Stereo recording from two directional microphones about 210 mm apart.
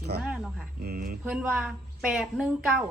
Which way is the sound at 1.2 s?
5° right (ahead or behind).